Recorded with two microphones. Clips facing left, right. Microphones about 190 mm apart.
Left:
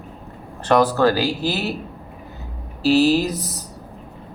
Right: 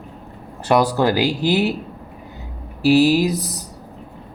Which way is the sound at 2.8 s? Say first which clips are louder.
Right 2 dB; 15° right (ahead or behind).